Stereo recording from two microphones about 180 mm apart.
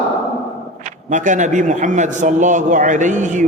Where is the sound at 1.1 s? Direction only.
45° right (ahead or behind).